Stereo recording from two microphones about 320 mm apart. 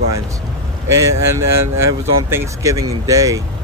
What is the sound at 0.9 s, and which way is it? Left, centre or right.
Speech, centre.